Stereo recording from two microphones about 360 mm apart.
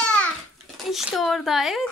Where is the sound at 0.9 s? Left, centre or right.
Centre.